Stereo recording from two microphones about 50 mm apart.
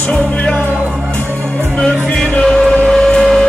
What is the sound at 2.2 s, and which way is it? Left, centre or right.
Music, centre.